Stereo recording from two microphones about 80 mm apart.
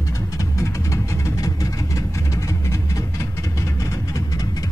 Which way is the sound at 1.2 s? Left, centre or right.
Left.